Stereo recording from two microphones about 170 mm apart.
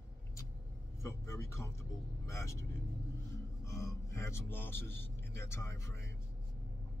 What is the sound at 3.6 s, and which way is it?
Speech, 20° left (ahead or behind).